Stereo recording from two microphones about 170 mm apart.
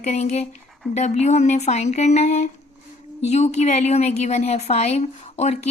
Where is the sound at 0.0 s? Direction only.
40° left (ahead or behind).